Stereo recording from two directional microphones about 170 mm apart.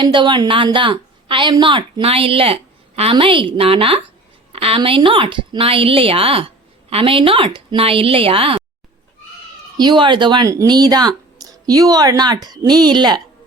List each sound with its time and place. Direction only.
0.0 s a woman's voice: 25° right (ahead or behind)
9.7 s speech: 25° right (ahead or behind)